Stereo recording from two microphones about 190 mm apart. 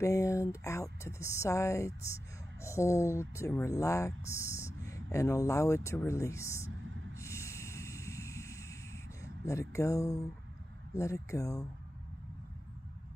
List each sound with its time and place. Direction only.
0.0 s speech: 15° left (ahead or behind)
7.2 s a sound: 15° left (ahead or behind)
9.2 s speech: 15° left (ahead or behind)